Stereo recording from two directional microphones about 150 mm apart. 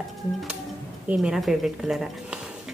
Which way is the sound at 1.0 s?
5° right (ahead or behind).